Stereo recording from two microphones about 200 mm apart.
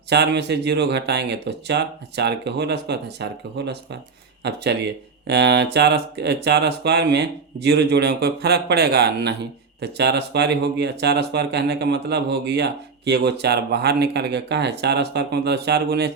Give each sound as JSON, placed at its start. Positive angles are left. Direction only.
{"t": 0.1, "sound": "speech", "side_deg": -60}